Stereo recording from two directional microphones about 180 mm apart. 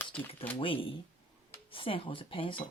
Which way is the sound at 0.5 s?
30° left (ahead or behind).